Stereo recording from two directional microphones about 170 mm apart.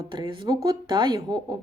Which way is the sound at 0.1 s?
25° right (ahead or behind).